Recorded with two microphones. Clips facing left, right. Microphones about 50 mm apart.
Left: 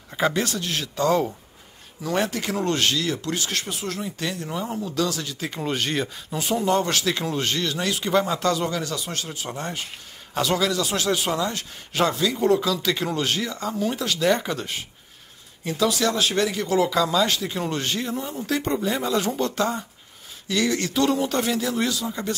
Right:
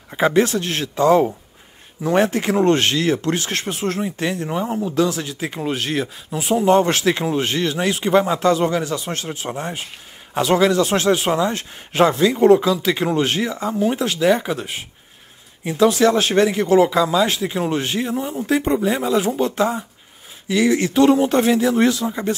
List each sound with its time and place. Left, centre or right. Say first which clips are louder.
0.1 s speech: right 7 dB; right
0.9 s speech: right 7 dB; right
5.6 s speech: right 2 dB; centre
6.6 s speech: right 8 dB; right
9.5 s speech: right 4 dB; centre
10.3 s speech: right 7 dB; right
14.2 s speech: right 4 dB; centre; by 16.9 s right
16.9 s speech: right 4 dB; centre; by 22.1 s right